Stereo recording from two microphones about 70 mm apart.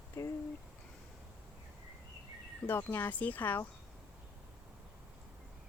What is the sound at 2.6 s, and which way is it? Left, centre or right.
Speech, left.